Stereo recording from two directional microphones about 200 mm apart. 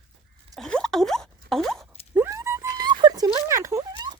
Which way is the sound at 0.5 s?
5° left (ahead or behind).